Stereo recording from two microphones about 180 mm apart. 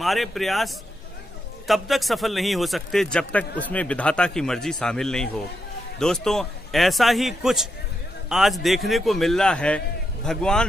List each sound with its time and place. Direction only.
0.0 s a man's voice: centre (ahead or behind)